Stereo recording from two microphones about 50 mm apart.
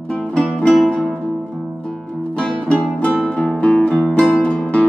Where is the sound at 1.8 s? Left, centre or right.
Centre.